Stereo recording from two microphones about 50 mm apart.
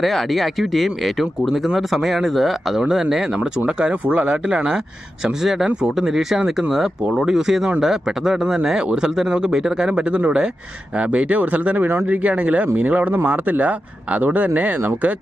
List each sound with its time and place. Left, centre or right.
0.0 s speech: centre
5.2 s speech: centre; by 14.8 s right